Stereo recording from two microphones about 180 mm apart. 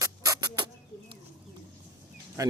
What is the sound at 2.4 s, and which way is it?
Speech, 20° right (ahead or behind).